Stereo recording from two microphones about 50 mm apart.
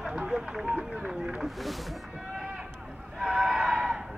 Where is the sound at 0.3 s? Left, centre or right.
Centre.